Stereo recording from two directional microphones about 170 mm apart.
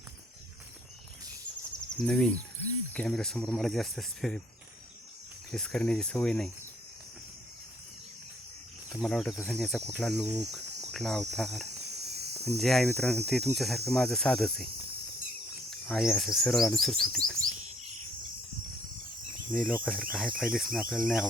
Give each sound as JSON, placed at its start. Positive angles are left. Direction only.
{"t": 2.0, "sound": "speech", "side_deg": 5}
{"t": 5.5, "sound": "speech", "side_deg": 5}
{"t": 8.9, "sound": "speech", "side_deg": 0}
{"t": 10.4, "sound": "cricket", "side_deg": 0}
{"t": 11.9, "sound": "cricket", "side_deg": -70}
{"t": 12.5, "sound": "speech", "side_deg": 0}
{"t": 15.9, "sound": "speech", "side_deg": 0}
{"t": 19.5, "sound": "speech", "side_deg": 5}